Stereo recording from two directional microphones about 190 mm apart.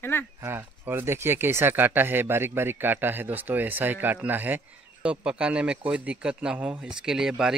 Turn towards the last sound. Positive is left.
turn(degrees=-5)  # may be behind; listen again after turning